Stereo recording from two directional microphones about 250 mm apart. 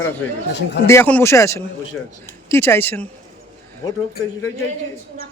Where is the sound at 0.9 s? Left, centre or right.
Centre.